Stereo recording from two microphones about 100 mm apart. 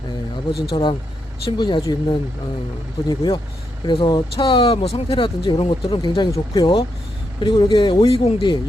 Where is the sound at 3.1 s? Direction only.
45° left (ahead or behind).